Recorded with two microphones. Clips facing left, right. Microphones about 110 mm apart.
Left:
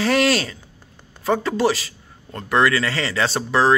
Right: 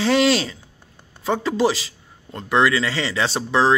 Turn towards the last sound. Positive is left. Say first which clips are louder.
# even
turn(degrees=-15)  # may be behind; listen again after turning